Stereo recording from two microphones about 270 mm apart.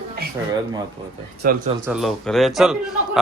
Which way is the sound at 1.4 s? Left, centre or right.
Right.